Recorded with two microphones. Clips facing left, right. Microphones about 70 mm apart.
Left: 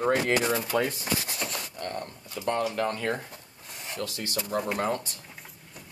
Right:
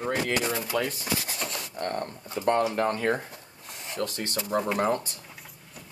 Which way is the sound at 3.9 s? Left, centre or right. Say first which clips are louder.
Right 2 dB; right.